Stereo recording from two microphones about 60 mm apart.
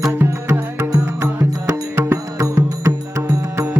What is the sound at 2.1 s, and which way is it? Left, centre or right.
Music, right.